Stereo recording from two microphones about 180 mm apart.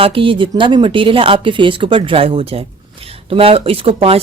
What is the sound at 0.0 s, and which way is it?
A woman's voice, 30° right (ahead or behind).